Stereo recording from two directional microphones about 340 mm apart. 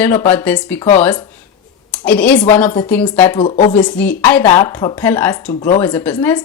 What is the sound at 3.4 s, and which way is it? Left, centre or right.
Speech, left.